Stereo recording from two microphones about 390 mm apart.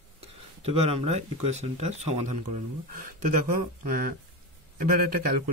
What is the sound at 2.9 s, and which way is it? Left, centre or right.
Speech, right.